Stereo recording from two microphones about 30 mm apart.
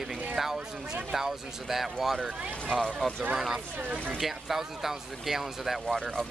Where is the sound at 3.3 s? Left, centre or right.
Centre.